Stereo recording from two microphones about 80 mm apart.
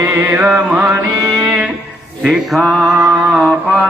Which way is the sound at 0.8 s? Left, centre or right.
Right.